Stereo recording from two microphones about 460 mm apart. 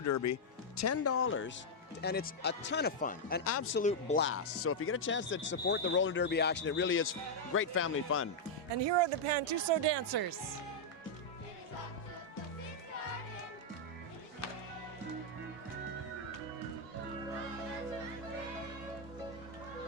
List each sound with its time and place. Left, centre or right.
0.0 s speech: left
8.7 s speech: right